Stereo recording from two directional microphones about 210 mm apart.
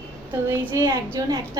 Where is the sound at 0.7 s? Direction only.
15° right (ahead or behind).